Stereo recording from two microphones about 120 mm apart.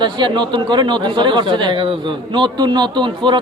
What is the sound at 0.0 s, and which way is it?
A man's voice, 40° right (ahead or behind).